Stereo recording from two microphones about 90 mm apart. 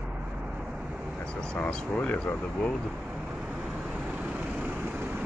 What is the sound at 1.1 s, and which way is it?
Speech, 10° left (ahead or behind).